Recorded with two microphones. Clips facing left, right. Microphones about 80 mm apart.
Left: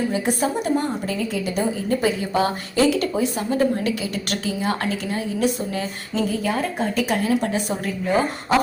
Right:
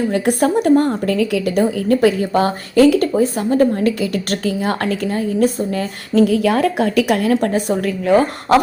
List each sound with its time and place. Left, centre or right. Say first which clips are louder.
0.1 s a woman's voice: right 6 dB; right
8.0 s speech: right 7 dB; right